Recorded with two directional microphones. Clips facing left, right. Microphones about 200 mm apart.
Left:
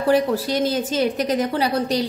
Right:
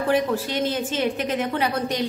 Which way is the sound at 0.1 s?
35° left (ahead or behind).